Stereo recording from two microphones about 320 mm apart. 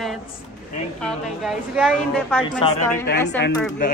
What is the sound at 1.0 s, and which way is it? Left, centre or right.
A woman's voice, centre.